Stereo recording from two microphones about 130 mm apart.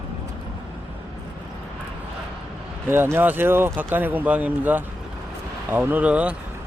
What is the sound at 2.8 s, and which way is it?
Speech, 15° right (ahead or behind).